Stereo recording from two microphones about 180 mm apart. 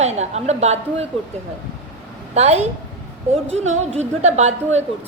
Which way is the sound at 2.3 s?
35° right (ahead or behind).